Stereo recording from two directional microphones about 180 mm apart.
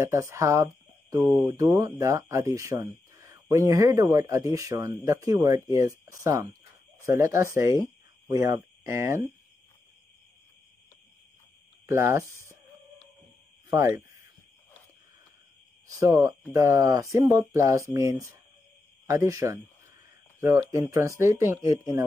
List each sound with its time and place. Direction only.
0.0 s speech: 15° right (ahead or behind)
11.8 s speech: 15° right (ahead or behind)
13.7 s speech: 15° right (ahead or behind)
16.0 s speech: 15° right (ahead or behind)